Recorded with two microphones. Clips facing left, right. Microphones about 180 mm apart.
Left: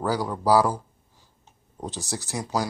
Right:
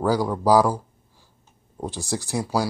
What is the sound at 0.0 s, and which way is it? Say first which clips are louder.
Speech: right 4 dB; 15° right (ahead or behind).